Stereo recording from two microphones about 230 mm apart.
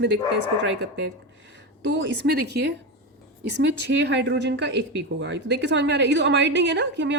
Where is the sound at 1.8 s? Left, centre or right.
Right.